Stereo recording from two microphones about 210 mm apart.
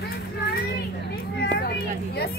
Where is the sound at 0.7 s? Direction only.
50° left (ahead or behind).